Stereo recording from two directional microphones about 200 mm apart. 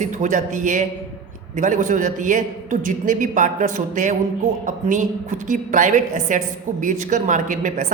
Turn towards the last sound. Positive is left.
turn(degrees=-40)  # may be behind; listen again after turning